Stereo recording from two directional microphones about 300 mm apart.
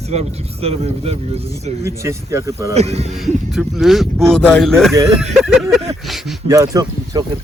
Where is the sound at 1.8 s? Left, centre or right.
Centre.